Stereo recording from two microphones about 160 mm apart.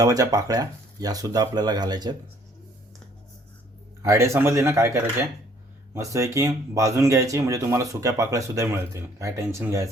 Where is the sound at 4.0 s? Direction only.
15° right (ahead or behind).